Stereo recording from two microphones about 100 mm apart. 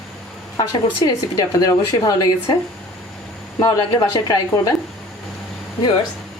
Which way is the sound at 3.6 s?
40° left (ahead or behind).